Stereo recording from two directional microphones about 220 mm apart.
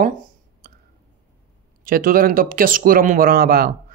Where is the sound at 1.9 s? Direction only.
40° right (ahead or behind).